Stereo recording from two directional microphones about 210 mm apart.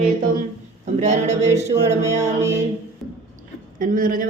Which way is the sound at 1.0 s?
35° right (ahead or behind).